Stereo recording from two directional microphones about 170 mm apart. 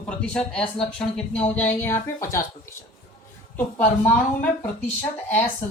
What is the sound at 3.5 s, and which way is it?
Speech, 10° left (ahead or behind).